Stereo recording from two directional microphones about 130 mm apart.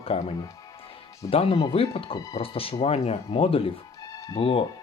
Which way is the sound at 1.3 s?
45° left (ahead or behind).